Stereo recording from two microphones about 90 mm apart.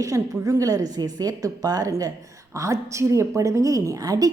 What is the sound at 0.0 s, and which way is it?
A woman's voice, 35° right (ahead or behind).